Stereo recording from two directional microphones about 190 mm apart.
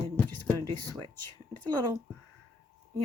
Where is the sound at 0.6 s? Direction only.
20° right (ahead or behind).